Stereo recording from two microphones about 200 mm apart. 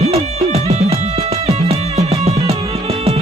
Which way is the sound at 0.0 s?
30° right (ahead or behind).